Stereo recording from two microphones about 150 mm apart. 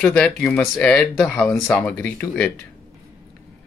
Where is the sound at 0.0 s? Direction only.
5° left (ahead or behind).